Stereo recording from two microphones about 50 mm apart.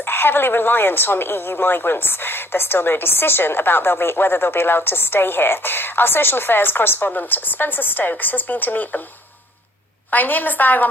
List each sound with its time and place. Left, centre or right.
0.0 s a woman's voice: left
10.1 s a woman's voice: left